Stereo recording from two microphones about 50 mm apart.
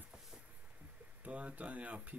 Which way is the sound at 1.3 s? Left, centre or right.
Right.